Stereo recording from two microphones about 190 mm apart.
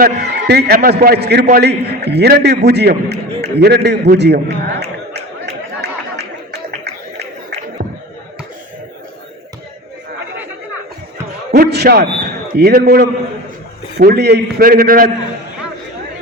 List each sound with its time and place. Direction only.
0.0 s a man's voice: 60° right (ahead or behind)
6.5 s a sound: 55° right (ahead or behind)
11.5 s a man's voice: 60° right (ahead or behind)